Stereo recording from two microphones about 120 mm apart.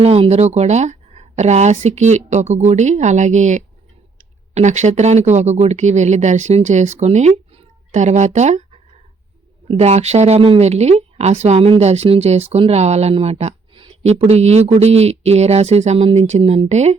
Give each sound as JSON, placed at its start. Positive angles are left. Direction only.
{"t": 0.0, "sound": "speech", "side_deg": -60}